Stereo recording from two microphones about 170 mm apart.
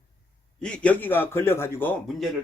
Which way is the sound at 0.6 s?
5° left (ahead or behind).